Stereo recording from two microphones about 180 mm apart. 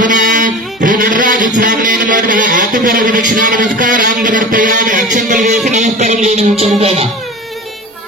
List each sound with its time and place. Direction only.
0.0 s guitar: 45° right (ahead or behind)
0.8 s a sound: 50° right (ahead or behind)
5.7 s music: 40° right (ahead or behind)